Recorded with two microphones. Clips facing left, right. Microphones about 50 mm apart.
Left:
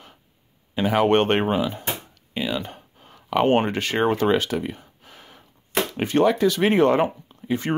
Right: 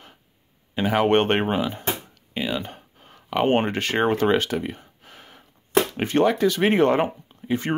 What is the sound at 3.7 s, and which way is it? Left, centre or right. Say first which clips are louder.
Speech: even; right.